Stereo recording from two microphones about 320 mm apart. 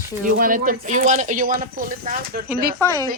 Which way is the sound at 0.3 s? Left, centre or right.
Right.